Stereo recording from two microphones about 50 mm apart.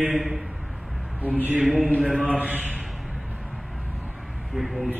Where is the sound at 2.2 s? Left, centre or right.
Right.